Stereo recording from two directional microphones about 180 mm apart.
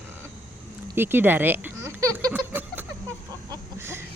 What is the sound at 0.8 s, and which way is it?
Speech, 10° right (ahead or behind).